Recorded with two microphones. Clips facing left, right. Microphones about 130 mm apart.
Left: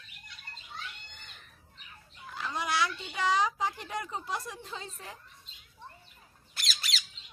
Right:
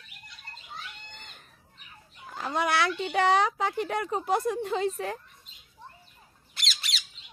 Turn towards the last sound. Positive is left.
turn(degrees=0)  # may be behind; listen again after turning